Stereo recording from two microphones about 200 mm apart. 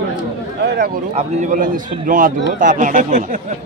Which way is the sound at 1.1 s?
40° right (ahead or behind).